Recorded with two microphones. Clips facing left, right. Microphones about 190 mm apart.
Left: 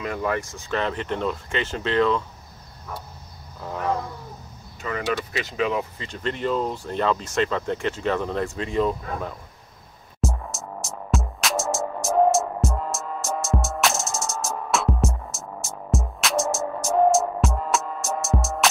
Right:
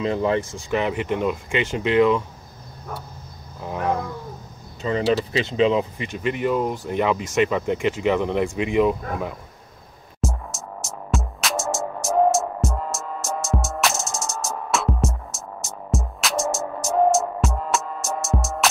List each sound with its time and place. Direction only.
0.0 s speech: 25° right (ahead or behind)
3.6 s speech: 15° right (ahead or behind)
4.8 s speech: 30° right (ahead or behind)
6.0 s speech: 10° right (ahead or behind)
10.2 s music: centre (ahead or behind)